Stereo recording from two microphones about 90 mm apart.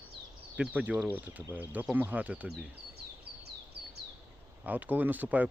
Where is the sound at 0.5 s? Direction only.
15° right (ahead or behind).